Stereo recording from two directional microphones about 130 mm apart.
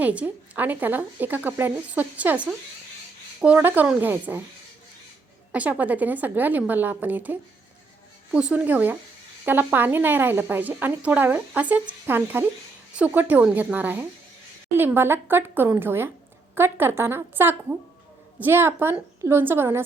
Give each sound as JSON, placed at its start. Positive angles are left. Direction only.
{"t": 0.0, "sound": "a woman's voice", "side_deg": -10}
{"t": 5.5, "sound": "a woman's voice", "side_deg": -10}